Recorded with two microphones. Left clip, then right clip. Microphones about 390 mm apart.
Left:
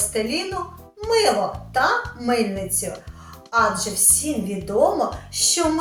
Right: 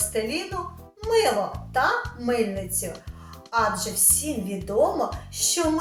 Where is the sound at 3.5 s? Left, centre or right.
Right.